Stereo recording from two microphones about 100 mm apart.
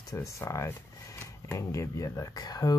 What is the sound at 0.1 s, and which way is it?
Speech, 30° left (ahead or behind).